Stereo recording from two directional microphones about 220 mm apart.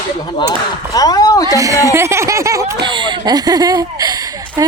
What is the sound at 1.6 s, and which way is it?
Speech, 15° right (ahead or behind).